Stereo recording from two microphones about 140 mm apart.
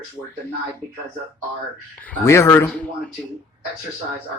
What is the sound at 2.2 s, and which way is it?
Speech, 20° left (ahead or behind).